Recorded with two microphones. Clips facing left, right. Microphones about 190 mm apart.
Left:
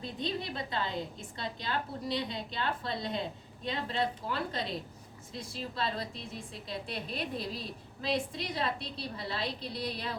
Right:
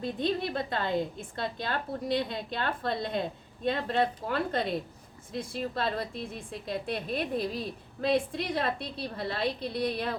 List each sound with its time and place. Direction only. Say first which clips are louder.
0.0 s a woman's voice: right 6 dB; 55° right (ahead or behind)